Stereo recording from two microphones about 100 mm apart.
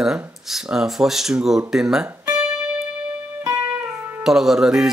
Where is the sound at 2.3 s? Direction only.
10° right (ahead or behind).